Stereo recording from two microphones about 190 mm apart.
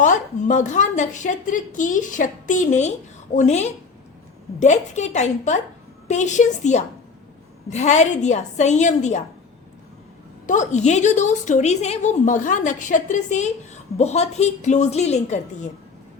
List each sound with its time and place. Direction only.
0.0 s a woman's voice: 40° left (ahead or behind)
10.4 s a woman's voice: 40° left (ahead or behind)